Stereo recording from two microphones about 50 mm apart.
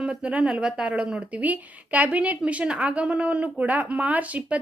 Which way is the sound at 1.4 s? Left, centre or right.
Right.